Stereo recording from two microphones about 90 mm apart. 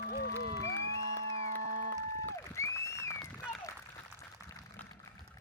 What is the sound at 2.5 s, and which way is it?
Applause, 35° left (ahead or behind).